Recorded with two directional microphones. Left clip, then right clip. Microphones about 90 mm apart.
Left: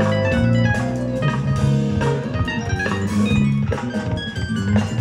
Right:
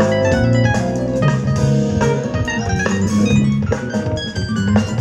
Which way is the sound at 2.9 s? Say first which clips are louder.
Right 4 dB; 30° right (ahead or behind).